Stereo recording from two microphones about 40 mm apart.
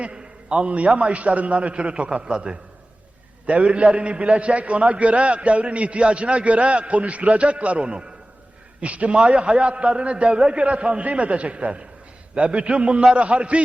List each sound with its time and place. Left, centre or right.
0.0 s a man's voice: right